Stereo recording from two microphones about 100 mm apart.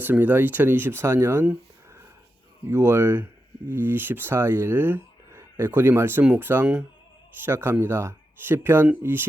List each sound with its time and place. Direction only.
0.0 s speech: 20° right (ahead or behind)
2.6 s speech: 25° right (ahead or behind)